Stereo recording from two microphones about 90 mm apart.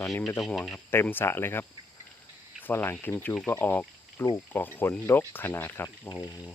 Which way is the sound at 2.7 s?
25° left (ahead or behind).